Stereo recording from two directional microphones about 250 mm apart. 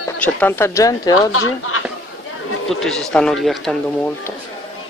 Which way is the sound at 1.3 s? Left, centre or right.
Left.